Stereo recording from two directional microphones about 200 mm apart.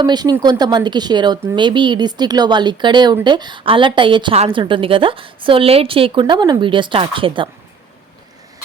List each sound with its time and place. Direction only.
0.0 s a woman's voice: 20° right (ahead or behind)